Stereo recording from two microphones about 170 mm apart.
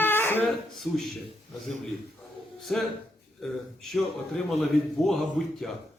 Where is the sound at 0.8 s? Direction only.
Centre (ahead or behind).